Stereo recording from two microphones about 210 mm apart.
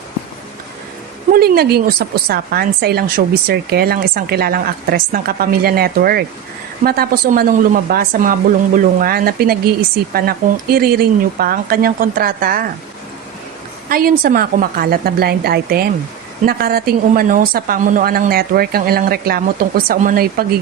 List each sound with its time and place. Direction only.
1.3 s a woman's voice: 45° right (ahead or behind)
13.9 s a woman's voice: 45° right (ahead or behind)